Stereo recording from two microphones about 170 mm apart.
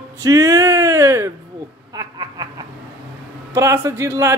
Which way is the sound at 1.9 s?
20° right (ahead or behind).